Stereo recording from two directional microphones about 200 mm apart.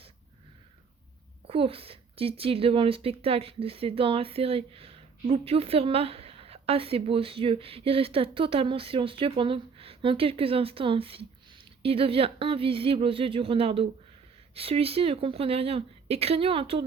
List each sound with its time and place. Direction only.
1.5 s a woman's voice: 30° right (ahead or behind)